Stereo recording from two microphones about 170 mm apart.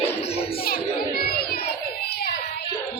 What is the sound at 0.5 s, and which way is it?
Music, 60° left (ahead or behind).